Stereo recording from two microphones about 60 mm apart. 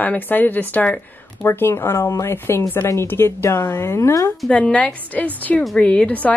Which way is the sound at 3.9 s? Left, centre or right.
Left.